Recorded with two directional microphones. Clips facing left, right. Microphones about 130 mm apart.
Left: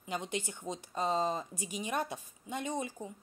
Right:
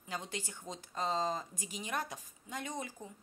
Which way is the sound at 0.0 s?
20° left (ahead or behind).